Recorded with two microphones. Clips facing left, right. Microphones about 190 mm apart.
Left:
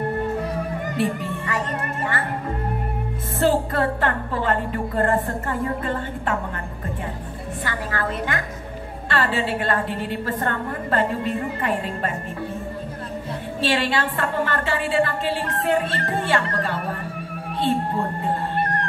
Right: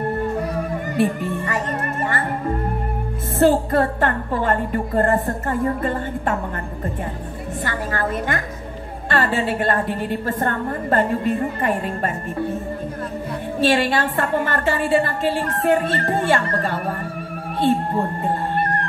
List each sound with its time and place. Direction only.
0.9 s music: 45° right (ahead or behind)
3.3 s a woman's voice: 45° right (ahead or behind)
7.6 s a woman's voice: 45° right (ahead or behind)
13.6 s a woman's voice: 45° right (ahead or behind)